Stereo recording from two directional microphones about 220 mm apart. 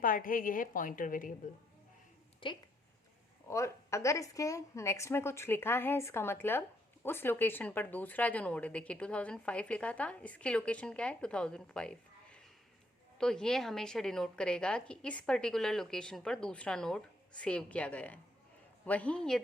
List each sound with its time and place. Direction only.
0.0 s a woman's voice: 40° left (ahead or behind)
2.4 s a woman's voice: 25° left (ahead or behind); by 19.4 s 5° left (ahead or behind)